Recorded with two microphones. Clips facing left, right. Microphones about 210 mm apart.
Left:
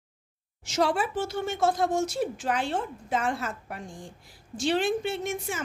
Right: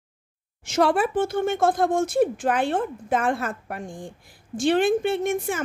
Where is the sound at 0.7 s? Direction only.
55° right (ahead or behind).